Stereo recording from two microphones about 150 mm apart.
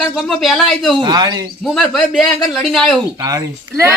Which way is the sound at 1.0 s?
30° right (ahead or behind).